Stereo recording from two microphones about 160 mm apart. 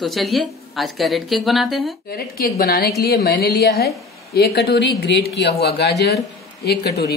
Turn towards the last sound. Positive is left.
turn(degrees=85)